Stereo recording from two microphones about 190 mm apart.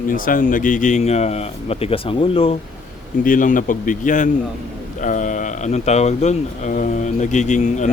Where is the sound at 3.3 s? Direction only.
45° left (ahead or behind).